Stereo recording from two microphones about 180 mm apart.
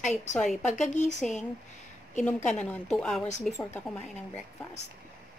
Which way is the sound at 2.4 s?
5° left (ahead or behind).